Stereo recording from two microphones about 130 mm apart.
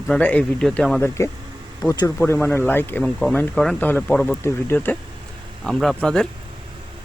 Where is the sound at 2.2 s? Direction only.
15° left (ahead or behind).